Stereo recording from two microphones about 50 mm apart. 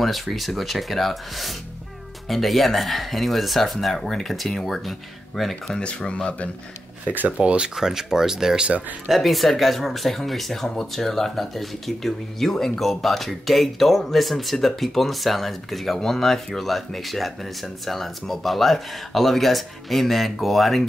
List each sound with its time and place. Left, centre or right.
0.0 s speech: centre
5.8 s speech: left
7.1 s speech: right
7.3 s speech: centre
8.6 s speech: right
9.1 s speech: centre